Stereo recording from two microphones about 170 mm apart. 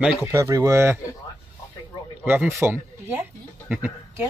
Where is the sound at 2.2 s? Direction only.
10° right (ahead or behind).